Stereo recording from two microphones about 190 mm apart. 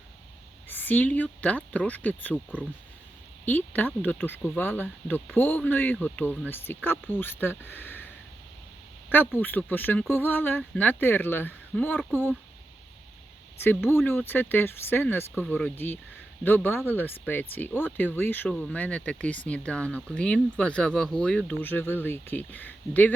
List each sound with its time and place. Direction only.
0.7 s speech: 10° left (ahead or behind)
9.4 s speech: 10° left (ahead or behind)
13.6 s speech: 10° left (ahead or behind)